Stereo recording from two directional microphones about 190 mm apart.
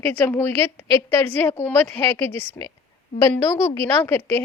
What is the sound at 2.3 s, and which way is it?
Speech, 30° right (ahead or behind).